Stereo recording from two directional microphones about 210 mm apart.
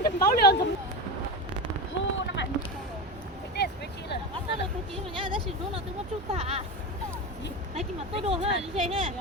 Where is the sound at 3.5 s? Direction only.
55° left (ahead or behind).